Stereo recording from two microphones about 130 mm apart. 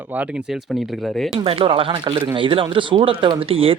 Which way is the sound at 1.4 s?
45° right (ahead or behind).